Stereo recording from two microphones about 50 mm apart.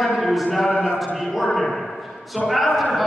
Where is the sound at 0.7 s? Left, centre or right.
Right.